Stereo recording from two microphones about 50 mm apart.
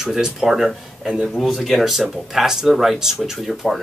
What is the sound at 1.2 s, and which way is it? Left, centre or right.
Speech, centre.